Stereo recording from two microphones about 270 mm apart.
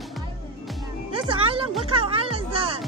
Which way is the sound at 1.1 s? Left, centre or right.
Centre.